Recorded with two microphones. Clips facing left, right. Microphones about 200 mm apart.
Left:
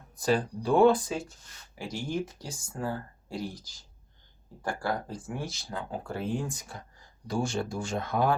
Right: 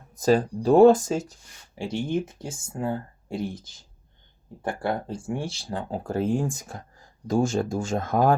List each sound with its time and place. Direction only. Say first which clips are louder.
0.2 s speech: right 6 dB; 40° right (ahead or behind)
1.7 s speech: right 6 dB; 25° right (ahead or behind)
4.8 s speech: right 5 dB; 25° right (ahead or behind); by 8.4 s 45° right (ahead or behind)